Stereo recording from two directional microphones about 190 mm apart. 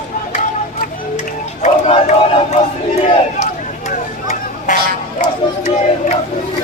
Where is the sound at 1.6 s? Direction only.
30° left (ahead or behind).